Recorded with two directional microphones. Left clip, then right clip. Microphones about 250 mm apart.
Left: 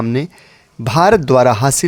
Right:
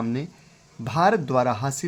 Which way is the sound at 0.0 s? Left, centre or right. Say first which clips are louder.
Left 10 dB; left.